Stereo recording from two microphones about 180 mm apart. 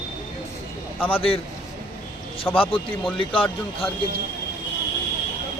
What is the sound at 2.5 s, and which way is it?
Speech, 30° left (ahead or behind).